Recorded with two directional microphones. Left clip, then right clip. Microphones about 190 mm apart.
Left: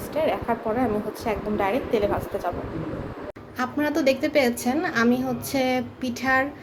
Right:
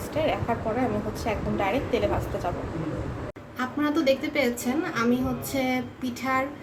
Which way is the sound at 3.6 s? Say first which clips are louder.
Left 2 dB; 40° left (ahead or behind).